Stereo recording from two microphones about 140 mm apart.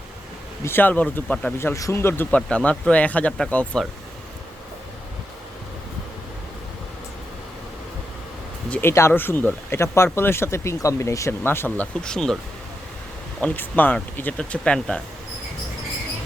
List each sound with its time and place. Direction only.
0.6 s speech: 15° left (ahead or behind)
1.5 s speech: 20° left (ahead or behind)
8.7 s speech: 15° left (ahead or behind)
12.0 s speech: 5° left (ahead or behind)
13.4 s speech: 10° left (ahead or behind)